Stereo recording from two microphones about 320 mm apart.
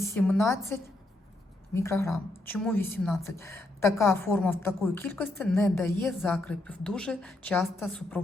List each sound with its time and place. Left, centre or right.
0.0 s a woman's voice: centre